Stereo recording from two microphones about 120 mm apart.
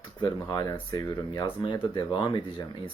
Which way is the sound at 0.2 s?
35° left (ahead or behind).